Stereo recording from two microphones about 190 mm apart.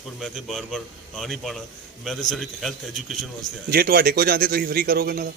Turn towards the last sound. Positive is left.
turn(degrees=-55)  # may be behind; listen again after turning